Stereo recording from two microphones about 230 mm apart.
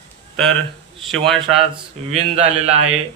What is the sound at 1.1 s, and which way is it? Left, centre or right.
Speech, centre.